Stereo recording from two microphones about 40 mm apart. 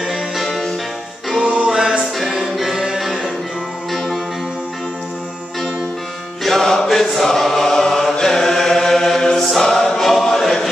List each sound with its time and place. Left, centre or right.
0.0 s music: centre
1.7 s music: centre
2.1 s music: centre
6.4 s music: centre
6.9 s chant: centre
9.6 s choir: centre